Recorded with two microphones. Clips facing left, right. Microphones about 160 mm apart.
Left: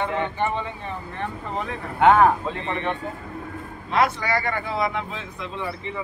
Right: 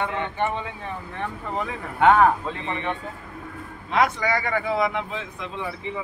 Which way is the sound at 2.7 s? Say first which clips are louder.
Left 2 dB; 15° right (ahead or behind).